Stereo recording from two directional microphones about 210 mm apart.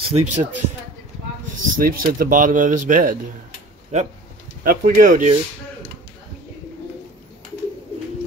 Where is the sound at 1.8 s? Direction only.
40° right (ahead or behind).